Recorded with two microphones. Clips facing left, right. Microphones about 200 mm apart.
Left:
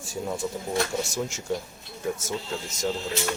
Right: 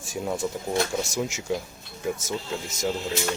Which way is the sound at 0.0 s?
20° right (ahead or behind).